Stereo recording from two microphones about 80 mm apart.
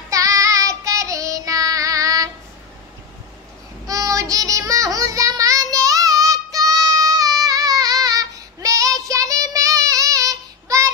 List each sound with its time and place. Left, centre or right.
0.1 s child singing: right
3.8 s child singing: right